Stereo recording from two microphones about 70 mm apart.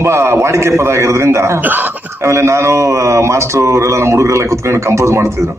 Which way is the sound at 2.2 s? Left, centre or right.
Right.